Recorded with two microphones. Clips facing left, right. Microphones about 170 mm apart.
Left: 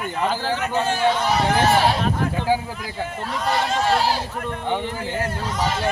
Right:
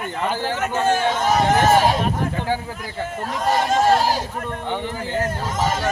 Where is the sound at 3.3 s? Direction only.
45° right (ahead or behind).